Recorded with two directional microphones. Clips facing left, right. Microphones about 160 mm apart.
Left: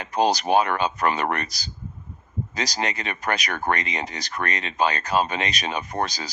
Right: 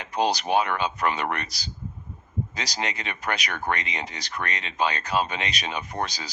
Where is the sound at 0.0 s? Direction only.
40° left (ahead or behind).